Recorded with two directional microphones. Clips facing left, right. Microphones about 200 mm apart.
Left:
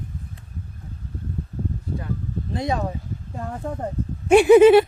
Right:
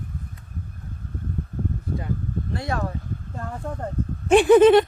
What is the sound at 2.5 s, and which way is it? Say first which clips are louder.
Speech: left 4 dB; 20° left (ahead or behind).